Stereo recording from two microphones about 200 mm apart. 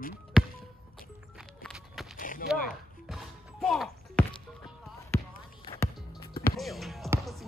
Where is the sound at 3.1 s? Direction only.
Centre (ahead or behind).